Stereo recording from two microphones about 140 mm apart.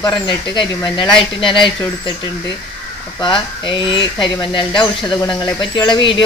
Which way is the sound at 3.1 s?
35° left (ahead or behind).